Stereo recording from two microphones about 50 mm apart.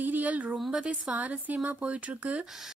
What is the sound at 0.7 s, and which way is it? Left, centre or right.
Speech, centre.